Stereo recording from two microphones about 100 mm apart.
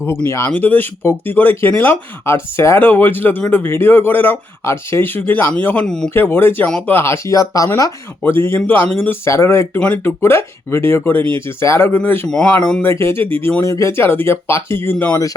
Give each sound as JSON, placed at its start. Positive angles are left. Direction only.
{"t": 0.3, "sound": "speech", "side_deg": 20}
{"t": 5.8, "sound": "speech", "side_deg": 5}
{"t": 6.1, "sound": "speech", "side_deg": 20}
{"t": 8.2, "sound": "speech", "side_deg": 25}
{"t": 12.3, "sound": "speech", "side_deg": 10}
{"t": 12.8, "sound": "speech", "side_deg": 25}